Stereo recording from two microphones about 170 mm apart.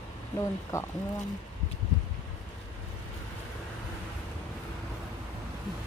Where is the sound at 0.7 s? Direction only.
15° left (ahead or behind).